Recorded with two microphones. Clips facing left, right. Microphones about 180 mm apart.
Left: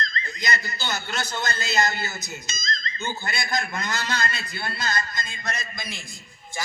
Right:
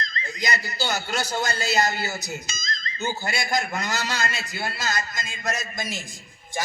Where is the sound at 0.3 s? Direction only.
40° right (ahead or behind).